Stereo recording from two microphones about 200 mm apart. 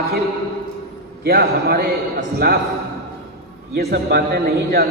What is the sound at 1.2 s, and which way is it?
Speech, 50° right (ahead or behind).